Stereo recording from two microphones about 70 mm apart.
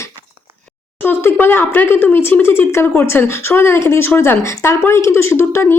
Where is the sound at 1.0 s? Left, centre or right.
Left.